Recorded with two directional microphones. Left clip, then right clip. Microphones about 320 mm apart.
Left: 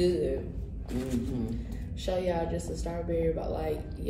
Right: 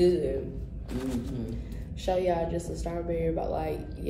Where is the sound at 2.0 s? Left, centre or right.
Centre.